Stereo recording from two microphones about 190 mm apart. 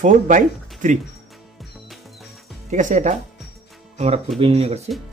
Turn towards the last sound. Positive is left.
turn(degrees=-35)  # may be behind; listen again after turning